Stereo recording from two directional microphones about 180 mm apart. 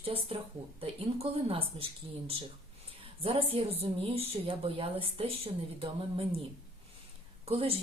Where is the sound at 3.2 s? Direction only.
30° right (ahead or behind).